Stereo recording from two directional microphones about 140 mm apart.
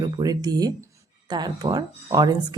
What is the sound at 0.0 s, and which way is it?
Speech, 30° right (ahead or behind).